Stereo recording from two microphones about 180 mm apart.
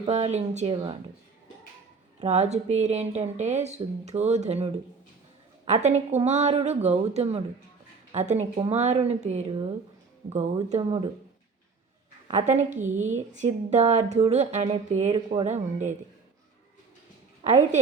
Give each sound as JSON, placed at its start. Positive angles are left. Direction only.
{"t": 0.0, "sound": "a woman's voice", "side_deg": -35}
{"t": 0.7, "sound": "speech", "side_deg": -25}
{"t": 2.2, "sound": "a woman's voice", "side_deg": -40}
{"t": 12.3, "sound": "a woman's voice", "side_deg": -40}
{"t": 17.5, "sound": "a woman's voice", "side_deg": -40}